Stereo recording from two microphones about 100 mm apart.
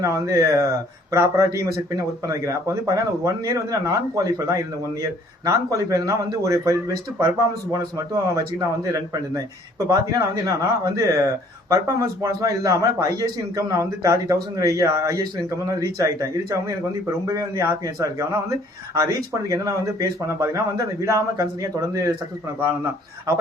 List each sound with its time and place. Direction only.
0.0 s a man's voice: 35° right (ahead or behind)